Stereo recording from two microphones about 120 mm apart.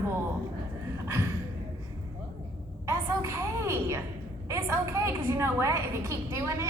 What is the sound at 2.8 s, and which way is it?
A woman's voice, 25° right (ahead or behind).